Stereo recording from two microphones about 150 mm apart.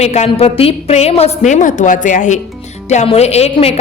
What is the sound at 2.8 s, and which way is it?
Speech, 45° left (ahead or behind).